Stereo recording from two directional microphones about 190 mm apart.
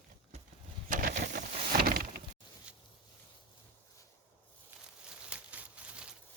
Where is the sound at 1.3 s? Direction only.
50° right (ahead or behind).